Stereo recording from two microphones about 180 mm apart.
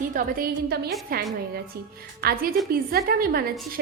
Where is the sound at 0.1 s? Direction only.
55° right (ahead or behind).